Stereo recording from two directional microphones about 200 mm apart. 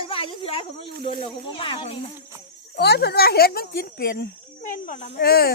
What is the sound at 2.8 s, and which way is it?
A woman's voice, 55° left (ahead or behind).